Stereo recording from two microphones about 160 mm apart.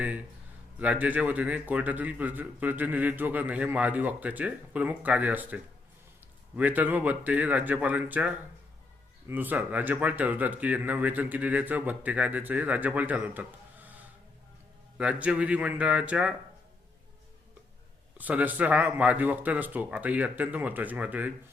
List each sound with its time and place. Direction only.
0.8 s a man's voice: 10° right (ahead or behind)
6.6 s a man's voice: 10° right (ahead or behind)
14.9 s a man's voice: 5° right (ahead or behind)
18.2 s a man's voice: 10° right (ahead or behind)